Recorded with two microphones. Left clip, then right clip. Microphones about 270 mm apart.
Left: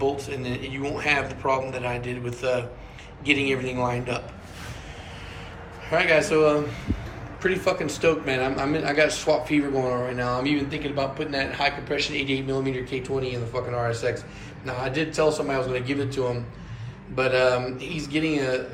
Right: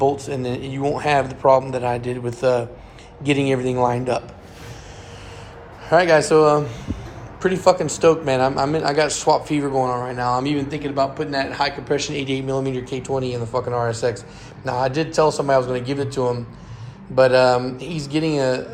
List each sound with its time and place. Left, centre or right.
0.0 s speech: centre
5.9 s speech: centre